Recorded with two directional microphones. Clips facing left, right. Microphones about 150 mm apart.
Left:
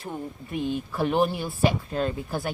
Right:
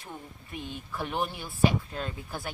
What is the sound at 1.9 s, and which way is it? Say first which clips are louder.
Speech: left 9 dB; 55° left (ahead or behind).